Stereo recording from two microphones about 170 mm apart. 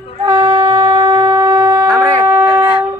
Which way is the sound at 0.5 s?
30° right (ahead or behind).